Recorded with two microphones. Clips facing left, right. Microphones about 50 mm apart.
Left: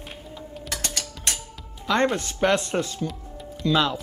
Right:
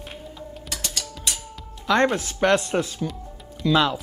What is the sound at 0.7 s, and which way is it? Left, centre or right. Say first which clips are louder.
Mechanisms: left 1 dB; left.